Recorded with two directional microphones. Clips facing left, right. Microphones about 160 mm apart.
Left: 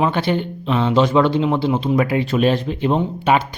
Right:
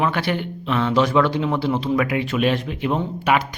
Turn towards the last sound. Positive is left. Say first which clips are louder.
# left 3 dB
turn(degrees=25)  # may be behind; listen again after turning